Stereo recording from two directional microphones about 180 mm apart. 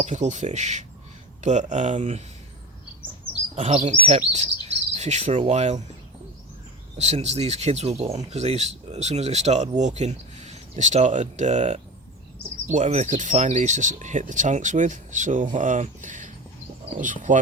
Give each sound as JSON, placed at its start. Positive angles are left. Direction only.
{"t": 0.0, "sound": "speech", "side_deg": -40}
{"t": 3.5, "sound": "speech", "side_deg": -35}
{"t": 4.7, "sound": "cricket", "side_deg": -40}
{"t": 7.0, "sound": "speech", "side_deg": -40}